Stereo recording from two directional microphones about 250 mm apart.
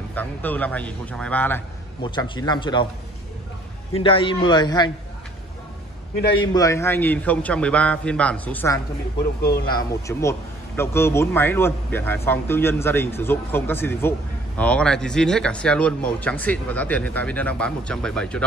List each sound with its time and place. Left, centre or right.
0.1 s a man's voice: centre
2.0 s a man's voice: centre
3.9 s a man's voice: left
6.4 s a man's voice: centre